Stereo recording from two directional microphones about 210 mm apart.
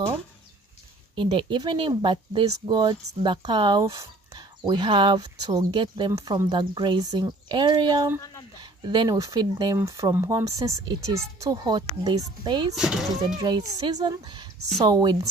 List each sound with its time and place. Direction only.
1.1 s speech: 25° right (ahead or behind)
12.7 s speech: centre (ahead or behind)
13.4 s speech: 20° right (ahead or behind)